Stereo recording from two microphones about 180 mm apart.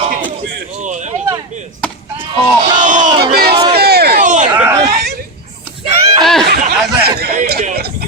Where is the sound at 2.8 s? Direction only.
45° right (ahead or behind).